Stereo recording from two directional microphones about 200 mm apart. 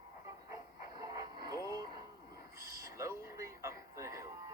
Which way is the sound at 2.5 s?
15° right (ahead or behind).